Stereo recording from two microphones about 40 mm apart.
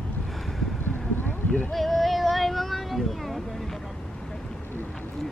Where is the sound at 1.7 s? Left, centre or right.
Centre.